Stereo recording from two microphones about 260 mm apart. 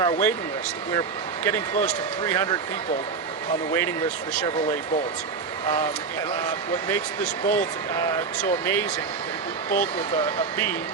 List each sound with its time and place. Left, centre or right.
0.0 s speech: centre
1.5 s speech: centre
3.7 s speech: centre
7.4 s speech: centre